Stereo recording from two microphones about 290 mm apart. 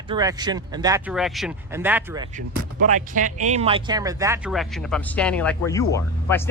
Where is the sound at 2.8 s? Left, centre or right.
Right.